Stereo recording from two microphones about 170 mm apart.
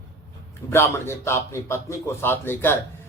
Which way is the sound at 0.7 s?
15° left (ahead or behind).